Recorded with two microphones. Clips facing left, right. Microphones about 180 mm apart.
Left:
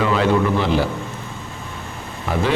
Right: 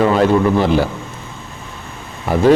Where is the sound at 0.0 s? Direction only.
45° right (ahead or behind).